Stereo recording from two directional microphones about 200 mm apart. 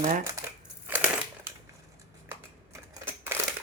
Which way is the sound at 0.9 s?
10° right (ahead or behind).